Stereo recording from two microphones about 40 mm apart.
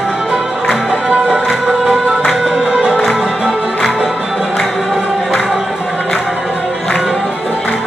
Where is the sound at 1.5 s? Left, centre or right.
Centre.